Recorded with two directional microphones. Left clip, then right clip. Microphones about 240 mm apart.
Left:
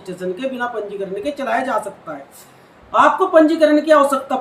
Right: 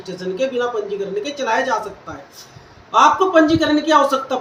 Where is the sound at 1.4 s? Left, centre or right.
Centre.